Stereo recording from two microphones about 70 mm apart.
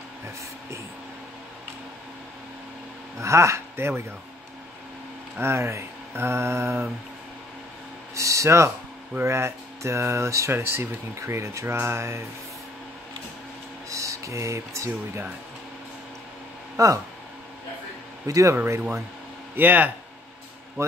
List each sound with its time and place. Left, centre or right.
3.2 s speech: right
5.4 s mantra: right
8.1 s speech: right
9.2 s mantra: right
13.8 s music: right
16.7 s speech: right
18.2 s speech: right
19.5 s speech: right